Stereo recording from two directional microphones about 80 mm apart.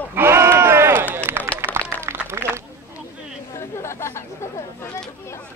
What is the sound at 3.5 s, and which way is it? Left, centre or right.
Chatter, left.